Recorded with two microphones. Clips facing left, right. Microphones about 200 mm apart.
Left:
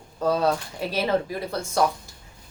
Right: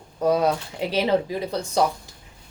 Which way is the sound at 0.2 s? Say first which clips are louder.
Right 2 dB; 15° right (ahead or behind).